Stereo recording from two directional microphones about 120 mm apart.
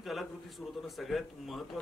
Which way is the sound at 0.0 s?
Centre (ahead or behind).